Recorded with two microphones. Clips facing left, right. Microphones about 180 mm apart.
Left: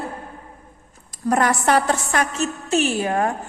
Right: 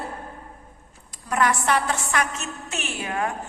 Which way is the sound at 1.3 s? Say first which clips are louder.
Left 4 dB; 40° left (ahead or behind).